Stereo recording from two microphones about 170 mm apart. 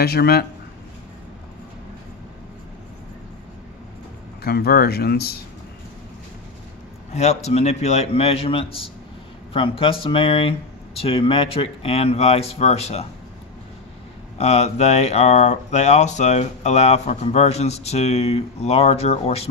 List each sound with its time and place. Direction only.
0.0 s speech: 65° left (ahead or behind)
4.4 s speech: 65° left (ahead or behind)
7.1 s speech: 40° left (ahead or behind)
14.3 s speech: 40° left (ahead or behind)